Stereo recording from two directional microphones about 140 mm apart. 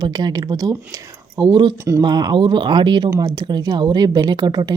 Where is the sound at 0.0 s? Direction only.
30° right (ahead or behind).